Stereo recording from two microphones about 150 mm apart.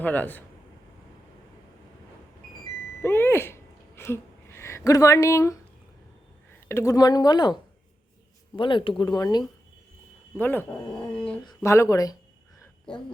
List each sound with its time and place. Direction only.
0.0 s speech: 10° left (ahead or behind)
3.0 s a sound: 15° left (ahead or behind)
6.7 s speech: 20° left (ahead or behind)
10.3 s speech: 15° left (ahead or behind)
11.4 s speech: 20° left (ahead or behind)